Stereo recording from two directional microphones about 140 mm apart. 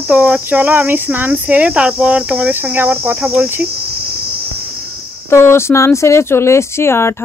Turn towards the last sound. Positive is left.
turn(degrees=20)  # may be behind; listen again after turning